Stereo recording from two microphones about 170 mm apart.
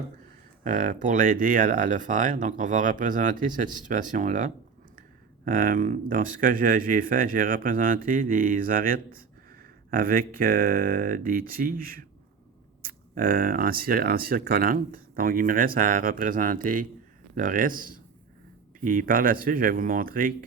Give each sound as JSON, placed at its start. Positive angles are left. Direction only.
{"t": 0.6, "sound": "speech", "side_deg": -45}